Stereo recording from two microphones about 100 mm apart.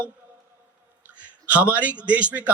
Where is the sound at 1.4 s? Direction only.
15° right (ahead or behind).